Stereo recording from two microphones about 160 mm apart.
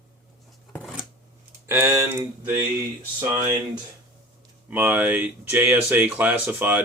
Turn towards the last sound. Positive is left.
turn(degrees=-10)  # may be behind; listen again after turning